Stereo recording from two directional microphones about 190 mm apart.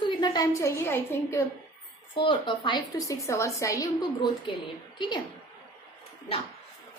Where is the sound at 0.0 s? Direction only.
20° left (ahead or behind).